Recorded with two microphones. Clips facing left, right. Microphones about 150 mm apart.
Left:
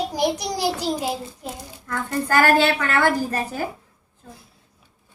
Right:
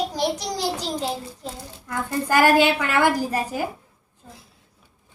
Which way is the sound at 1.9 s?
15° right (ahead or behind).